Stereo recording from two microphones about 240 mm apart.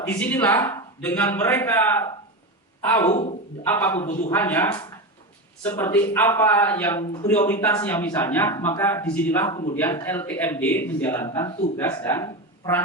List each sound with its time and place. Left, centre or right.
0.2 s speech: centre
4.0 s a man's voice: left
4.3 s speech: centre